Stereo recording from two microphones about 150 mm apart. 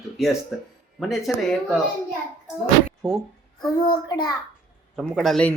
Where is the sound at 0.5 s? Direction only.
5° right (ahead or behind).